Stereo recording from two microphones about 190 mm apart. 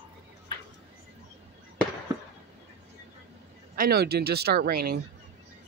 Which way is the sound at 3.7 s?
55° right (ahead or behind).